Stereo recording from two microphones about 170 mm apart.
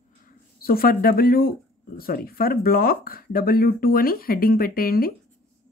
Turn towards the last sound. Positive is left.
turn(degrees=60)  # may be behind; listen again after turning